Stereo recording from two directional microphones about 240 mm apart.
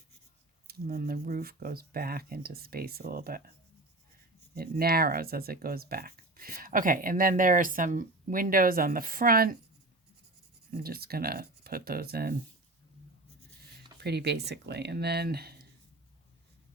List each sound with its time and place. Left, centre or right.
0.7 s speech: right
4.5 s speech: right
10.7 s speech: right
14.0 s speech: right